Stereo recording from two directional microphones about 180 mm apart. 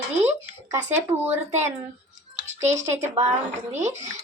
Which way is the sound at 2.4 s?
40° right (ahead or behind).